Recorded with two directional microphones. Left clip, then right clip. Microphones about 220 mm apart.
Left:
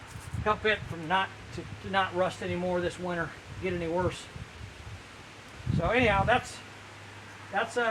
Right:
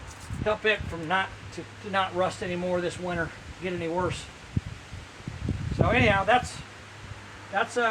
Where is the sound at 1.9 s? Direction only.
15° right (ahead or behind).